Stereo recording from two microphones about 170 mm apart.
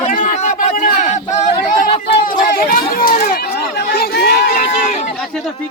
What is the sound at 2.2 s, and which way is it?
Speech, 55° left (ahead or behind).